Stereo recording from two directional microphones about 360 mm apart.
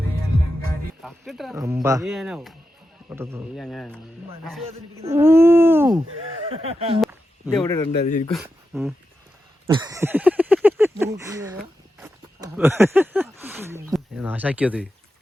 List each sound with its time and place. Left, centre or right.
1.0 s a man's voice: centre
7.0 s a sound: centre
7.6 s a man's voice: centre
8.3 s speech: centre
9.6 s a sound: centre
11.9 s speech: centre